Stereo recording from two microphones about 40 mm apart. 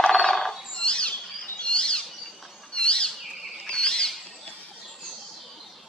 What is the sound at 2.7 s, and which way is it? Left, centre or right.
Bird, left.